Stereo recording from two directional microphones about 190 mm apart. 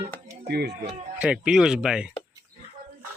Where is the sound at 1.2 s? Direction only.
5° right (ahead or behind).